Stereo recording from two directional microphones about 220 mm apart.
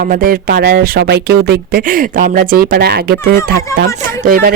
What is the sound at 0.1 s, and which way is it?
Speech, 40° right (ahead or behind).